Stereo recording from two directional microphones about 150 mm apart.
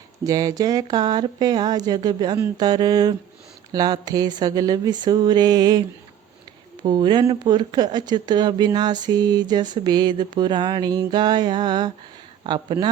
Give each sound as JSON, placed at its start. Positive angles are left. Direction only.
{"t": 0.3, "sound": "speech", "side_deg": -25}
{"t": 6.8, "sound": "speech", "side_deg": -30}